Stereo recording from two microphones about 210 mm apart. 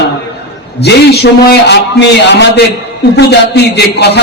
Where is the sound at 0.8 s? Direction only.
50° left (ahead or behind).